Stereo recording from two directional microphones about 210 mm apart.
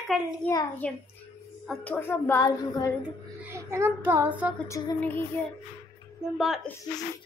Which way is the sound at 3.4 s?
15° right (ahead or behind).